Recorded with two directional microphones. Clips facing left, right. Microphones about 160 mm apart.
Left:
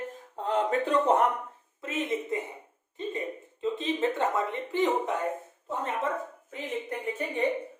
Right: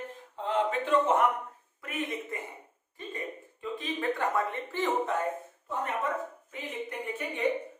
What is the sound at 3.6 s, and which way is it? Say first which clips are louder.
Speech: left 4 dB; 25° left (ahead or behind).